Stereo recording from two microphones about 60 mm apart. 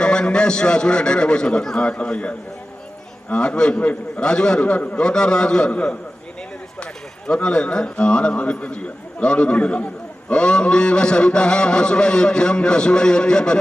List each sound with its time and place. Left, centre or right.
0.0 s a man's voice: centre
4.6 s a man's voice: left
7.3 s a man's voice: centre